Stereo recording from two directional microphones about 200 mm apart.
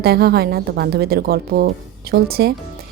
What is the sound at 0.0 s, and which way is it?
A woman's voice, 50° right (ahead or behind).